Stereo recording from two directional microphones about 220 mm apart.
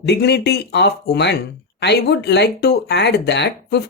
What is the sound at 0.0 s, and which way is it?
Speech, 50° left (ahead or behind).